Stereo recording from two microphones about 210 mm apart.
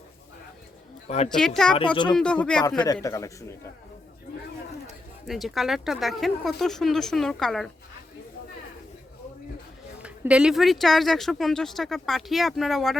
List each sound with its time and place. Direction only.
1.0 s a woman's voice: 30° left (ahead or behind)
1.4 s speech: centre (ahead or behind)
2.8 s speech: 15° left (ahead or behind)
5.2 s speech: centre (ahead or behind)
10.0 s speech: 5° right (ahead or behind)